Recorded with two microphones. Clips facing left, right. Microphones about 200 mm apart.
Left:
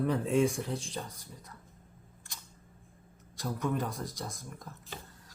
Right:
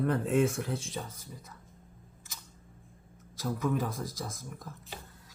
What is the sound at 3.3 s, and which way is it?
Speech, centre (ahead or behind).